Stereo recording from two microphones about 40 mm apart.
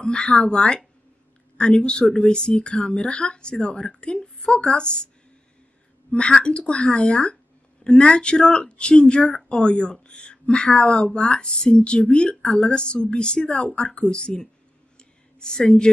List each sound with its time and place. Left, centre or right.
0.0 s speech: left
6.1 s speech: left
15.0 s a sound: centre